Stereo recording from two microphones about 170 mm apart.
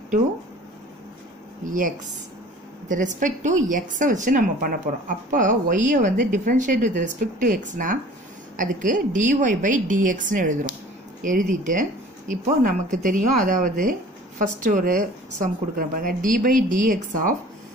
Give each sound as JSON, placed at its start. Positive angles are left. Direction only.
{"t": 1.7, "sound": "a woman's voice", "side_deg": -55}